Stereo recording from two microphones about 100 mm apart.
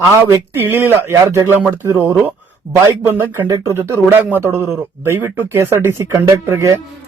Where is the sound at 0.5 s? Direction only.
20° right (ahead or behind).